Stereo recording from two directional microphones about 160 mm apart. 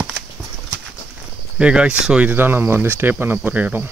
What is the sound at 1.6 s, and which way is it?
Speech, 5° right (ahead or behind).